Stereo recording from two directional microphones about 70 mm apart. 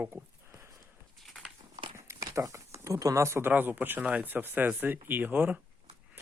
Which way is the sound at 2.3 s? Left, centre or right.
Right.